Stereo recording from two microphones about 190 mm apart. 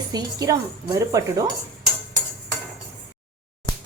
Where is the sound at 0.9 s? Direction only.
15° right (ahead or behind).